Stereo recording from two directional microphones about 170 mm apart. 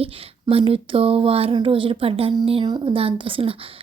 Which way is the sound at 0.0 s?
35° right (ahead or behind).